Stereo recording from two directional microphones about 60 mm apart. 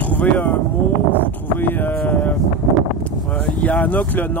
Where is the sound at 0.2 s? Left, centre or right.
Left.